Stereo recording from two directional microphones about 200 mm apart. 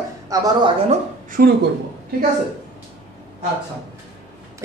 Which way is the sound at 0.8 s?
45° right (ahead or behind).